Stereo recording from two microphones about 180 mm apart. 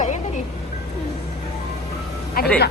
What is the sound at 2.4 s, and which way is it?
Speech, 55° left (ahead or behind).